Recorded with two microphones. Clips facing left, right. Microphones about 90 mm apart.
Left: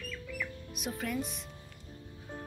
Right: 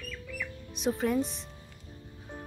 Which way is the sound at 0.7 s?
30° right (ahead or behind).